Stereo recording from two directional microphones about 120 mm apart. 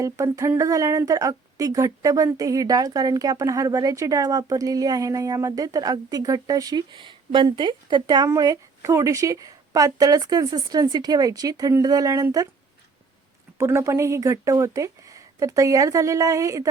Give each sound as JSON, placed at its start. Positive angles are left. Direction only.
{"t": 0.0, "sound": "a woman's voice", "side_deg": -25}
{"t": 13.6, "sound": "speech", "side_deg": -25}